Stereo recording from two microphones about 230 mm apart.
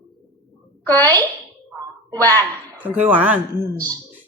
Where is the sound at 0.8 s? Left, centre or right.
Centre.